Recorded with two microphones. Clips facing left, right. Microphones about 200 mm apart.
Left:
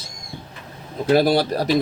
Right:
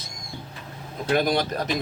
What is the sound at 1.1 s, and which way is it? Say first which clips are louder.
Speech: left 6 dB; 35° left (ahead or behind).